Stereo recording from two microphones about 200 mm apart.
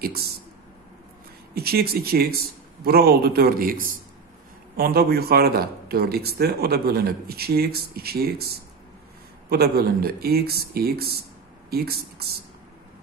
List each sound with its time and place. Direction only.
0.0 s speech: 50° right (ahead or behind)
1.5 s speech: 50° right (ahead or behind)